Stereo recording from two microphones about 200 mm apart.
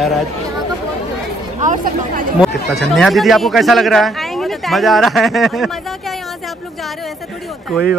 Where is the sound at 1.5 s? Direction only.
40° right (ahead or behind).